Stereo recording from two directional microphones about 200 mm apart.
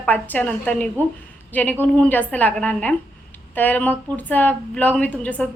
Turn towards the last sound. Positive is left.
turn(degrees=5)  # may be behind; listen again after turning